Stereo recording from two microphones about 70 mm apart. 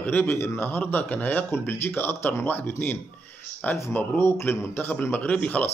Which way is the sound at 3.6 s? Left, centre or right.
Left.